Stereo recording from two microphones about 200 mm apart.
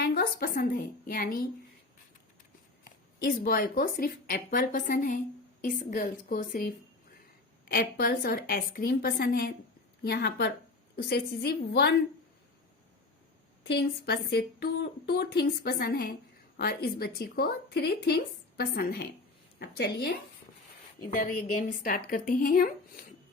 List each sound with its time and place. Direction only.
0.0 s speech: 50° left (ahead or behind)
2.8 s speech: 45° left (ahead or behind)
13.7 s speech: 55° left (ahead or behind)
21.1 s speech: 40° left (ahead or behind)